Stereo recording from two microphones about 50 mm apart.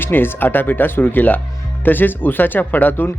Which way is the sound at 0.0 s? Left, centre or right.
Left.